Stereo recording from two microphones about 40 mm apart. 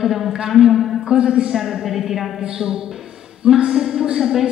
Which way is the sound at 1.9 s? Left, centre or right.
Centre.